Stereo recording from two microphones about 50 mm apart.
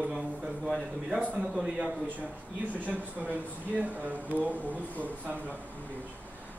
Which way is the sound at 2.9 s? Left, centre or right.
Right.